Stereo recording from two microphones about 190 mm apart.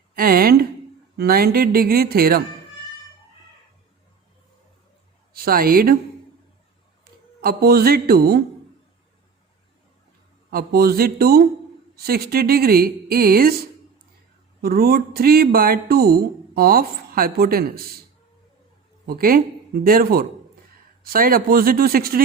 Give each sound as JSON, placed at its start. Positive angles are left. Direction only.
{"t": 0.2, "sound": "a sound", "side_deg": -50}
{"t": 1.1, "sound": "speech", "side_deg": -55}
{"t": 5.3, "sound": "a woman's voice", "side_deg": -50}
{"t": 7.0, "sound": "speech", "side_deg": -55}
{"t": 10.5, "sound": "speech", "side_deg": -55}
{"t": 14.6, "sound": "speech", "side_deg": -55}
{"t": 19.0, "sound": "speech", "side_deg": -50}